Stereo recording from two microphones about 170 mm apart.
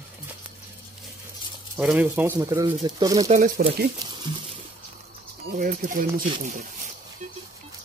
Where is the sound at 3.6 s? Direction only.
65° right (ahead or behind).